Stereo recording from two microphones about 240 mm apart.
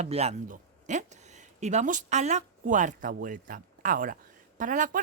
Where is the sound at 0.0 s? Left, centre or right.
Right.